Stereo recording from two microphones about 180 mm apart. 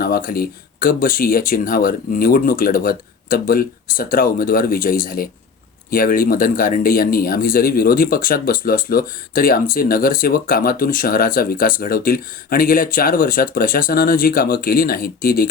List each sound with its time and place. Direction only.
0.0 s speech: 55° left (ahead or behind)